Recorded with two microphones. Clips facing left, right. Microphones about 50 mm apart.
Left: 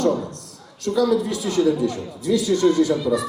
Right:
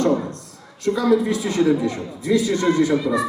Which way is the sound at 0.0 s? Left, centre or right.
Right.